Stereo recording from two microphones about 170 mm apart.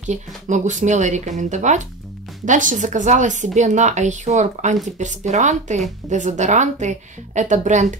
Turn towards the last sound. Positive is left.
turn(degrees=-45)  # may be behind; listen again after turning